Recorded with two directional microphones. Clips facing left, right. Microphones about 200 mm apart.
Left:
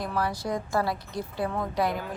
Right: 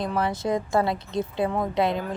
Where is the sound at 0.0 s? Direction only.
20° right (ahead or behind).